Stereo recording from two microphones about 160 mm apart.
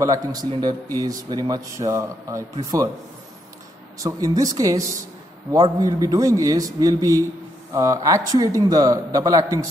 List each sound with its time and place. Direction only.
0.0 s speech: 20° right (ahead or behind)
4.0 s speech: 20° right (ahead or behind)